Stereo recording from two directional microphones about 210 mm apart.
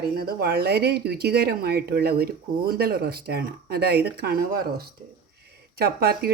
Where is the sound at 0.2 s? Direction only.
50° right (ahead or behind).